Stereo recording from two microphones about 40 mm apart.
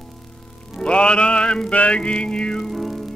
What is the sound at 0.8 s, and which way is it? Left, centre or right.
Music, left.